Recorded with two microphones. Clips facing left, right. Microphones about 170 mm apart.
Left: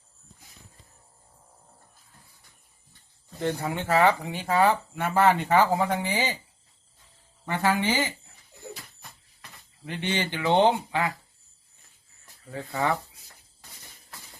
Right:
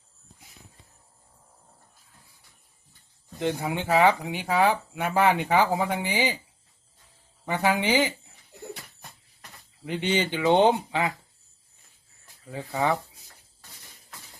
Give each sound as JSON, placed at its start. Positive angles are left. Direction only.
{"t": 3.4, "sound": "speech", "side_deg": -15}
{"t": 7.4, "sound": "speech", "side_deg": -15}
{"t": 9.8, "sound": "speech", "side_deg": -15}
{"t": 12.5, "sound": "speech", "side_deg": -15}